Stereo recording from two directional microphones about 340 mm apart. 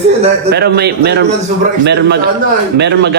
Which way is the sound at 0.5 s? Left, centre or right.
Right.